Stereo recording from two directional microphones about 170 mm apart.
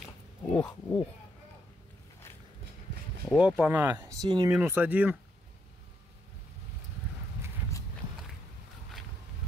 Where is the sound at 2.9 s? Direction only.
90° right.